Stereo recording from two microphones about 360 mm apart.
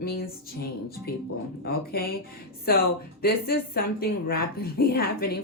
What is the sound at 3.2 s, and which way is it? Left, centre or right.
A woman's voice, left.